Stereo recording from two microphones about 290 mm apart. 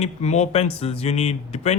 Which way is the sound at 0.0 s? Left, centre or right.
Left.